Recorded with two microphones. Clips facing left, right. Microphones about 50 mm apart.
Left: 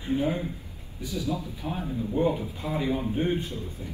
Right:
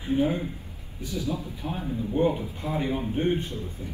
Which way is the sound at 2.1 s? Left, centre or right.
Right.